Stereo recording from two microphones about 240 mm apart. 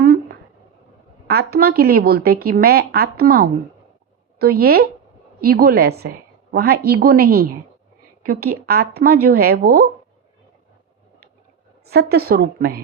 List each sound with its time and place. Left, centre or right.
0.0 s a sound: right
1.3 s a woman's voice: right
11.9 s a woman's voice: right